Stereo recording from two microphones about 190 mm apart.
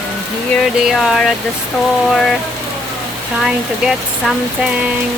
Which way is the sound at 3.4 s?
5° right (ahead or behind).